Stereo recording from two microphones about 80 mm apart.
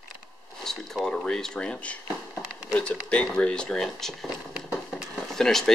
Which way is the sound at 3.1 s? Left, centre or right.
Centre.